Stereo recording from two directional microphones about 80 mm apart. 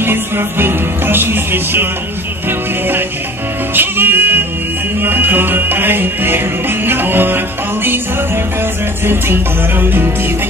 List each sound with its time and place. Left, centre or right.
0.0 s music: right
3.7 s music: right
9.0 s music: right